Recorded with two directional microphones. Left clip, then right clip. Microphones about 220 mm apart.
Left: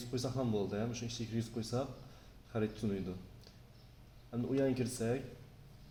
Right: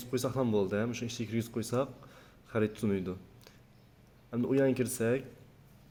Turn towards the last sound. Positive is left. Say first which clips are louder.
# right 6 dB
turn(degrees=-40)  # may be behind; listen again after turning